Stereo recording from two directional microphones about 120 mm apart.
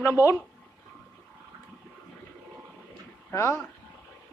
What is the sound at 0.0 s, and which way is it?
Speech, 25° left (ahead or behind).